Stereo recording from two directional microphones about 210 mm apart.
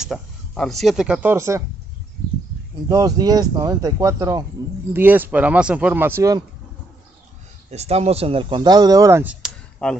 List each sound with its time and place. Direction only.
0.0 s speech: centre (ahead or behind)
2.9 s speech: 20° right (ahead or behind)
7.7 s speech: 30° right (ahead or behind); by 9.5 s 5° right (ahead or behind)
9.8 s speech: 5° left (ahead or behind)